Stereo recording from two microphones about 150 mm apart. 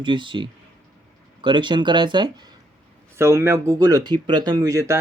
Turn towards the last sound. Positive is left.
turn(degrees=-20)  # may be behind; listen again after turning